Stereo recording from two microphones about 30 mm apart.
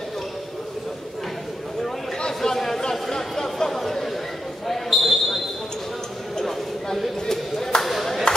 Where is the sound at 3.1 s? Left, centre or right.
Centre.